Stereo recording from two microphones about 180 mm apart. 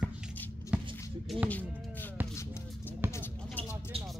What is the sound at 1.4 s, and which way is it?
Speech, 10° left (ahead or behind).